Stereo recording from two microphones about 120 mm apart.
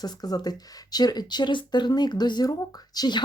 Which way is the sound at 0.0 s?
35° left (ahead or behind).